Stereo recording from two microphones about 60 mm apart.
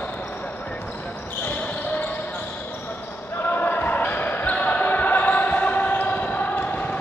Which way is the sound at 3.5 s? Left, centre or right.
Left.